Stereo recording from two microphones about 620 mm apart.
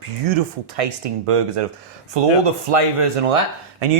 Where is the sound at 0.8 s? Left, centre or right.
Right.